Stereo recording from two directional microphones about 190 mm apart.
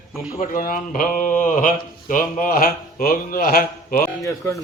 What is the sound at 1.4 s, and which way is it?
Speech, 45° left (ahead or behind).